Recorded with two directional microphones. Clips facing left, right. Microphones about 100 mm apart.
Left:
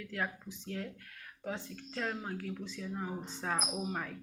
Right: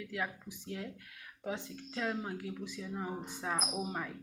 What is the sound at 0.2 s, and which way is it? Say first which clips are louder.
Speech: left 3 dB; 10° right (ahead or behind).